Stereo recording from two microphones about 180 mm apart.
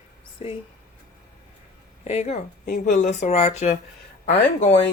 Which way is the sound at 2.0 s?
35° left (ahead or behind).